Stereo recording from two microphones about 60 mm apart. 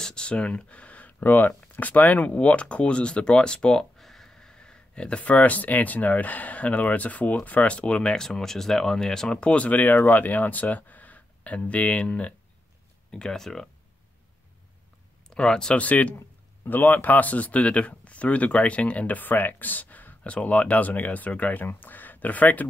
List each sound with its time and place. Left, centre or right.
0.0 s speech: centre
15.2 s speech: centre
15.8 s speech: left